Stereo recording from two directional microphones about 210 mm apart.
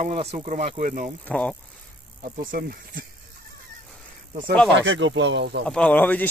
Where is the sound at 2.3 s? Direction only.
40° right (ahead or behind).